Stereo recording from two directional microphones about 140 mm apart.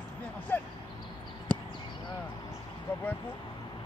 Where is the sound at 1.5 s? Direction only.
10° left (ahead or behind).